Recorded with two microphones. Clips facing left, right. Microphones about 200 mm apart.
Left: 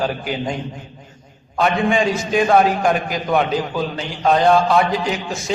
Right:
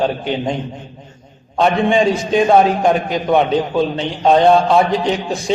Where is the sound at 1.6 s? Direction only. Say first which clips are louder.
Right 4 dB; 30° right (ahead or behind).